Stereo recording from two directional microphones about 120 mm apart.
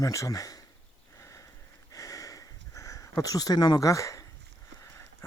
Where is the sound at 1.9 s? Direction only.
30° left (ahead or behind).